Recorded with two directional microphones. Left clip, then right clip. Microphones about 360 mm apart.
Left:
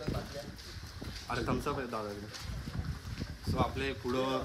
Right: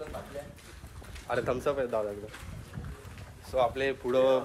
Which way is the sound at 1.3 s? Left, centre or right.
Centre.